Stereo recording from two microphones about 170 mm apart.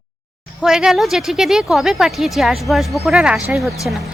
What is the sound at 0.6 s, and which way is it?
Speech, 5° right (ahead or behind).